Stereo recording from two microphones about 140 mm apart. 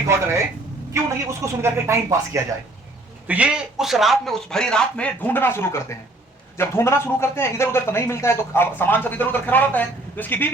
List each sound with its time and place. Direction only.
0.1 s speech: 20° right (ahead or behind)
3.2 s speech: 10° right (ahead or behind); by 10.5 s 15° left (ahead or behind)